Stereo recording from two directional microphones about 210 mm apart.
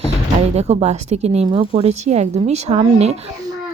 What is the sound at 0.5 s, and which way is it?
Speech, 30° right (ahead or behind).